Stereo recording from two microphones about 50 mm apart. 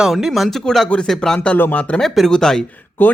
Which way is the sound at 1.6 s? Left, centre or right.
Left.